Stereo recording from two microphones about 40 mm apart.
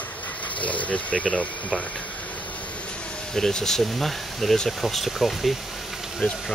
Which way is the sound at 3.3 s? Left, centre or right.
Centre.